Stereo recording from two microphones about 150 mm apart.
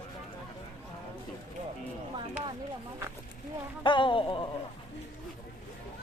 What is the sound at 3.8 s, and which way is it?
Speech, 35° left (ahead or behind).